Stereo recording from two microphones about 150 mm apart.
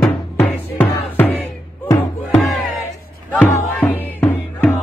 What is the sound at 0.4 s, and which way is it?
Music, 10° left (ahead or behind).